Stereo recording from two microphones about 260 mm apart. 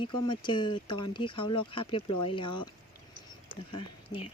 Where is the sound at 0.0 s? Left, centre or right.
Centre.